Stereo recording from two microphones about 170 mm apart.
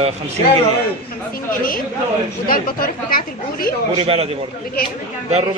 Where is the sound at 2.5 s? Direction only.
60° left (ahead or behind).